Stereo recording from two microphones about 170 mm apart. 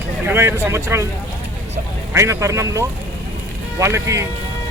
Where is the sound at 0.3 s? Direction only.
15° right (ahead or behind).